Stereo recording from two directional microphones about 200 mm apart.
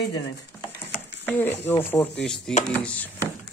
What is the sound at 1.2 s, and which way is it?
Speech, 10° left (ahead or behind).